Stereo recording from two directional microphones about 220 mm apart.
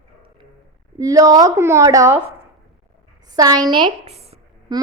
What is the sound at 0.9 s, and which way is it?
A child's voice, 15° right (ahead or behind).